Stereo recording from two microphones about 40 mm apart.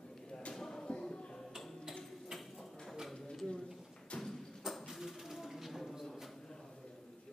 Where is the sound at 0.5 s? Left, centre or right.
Centre.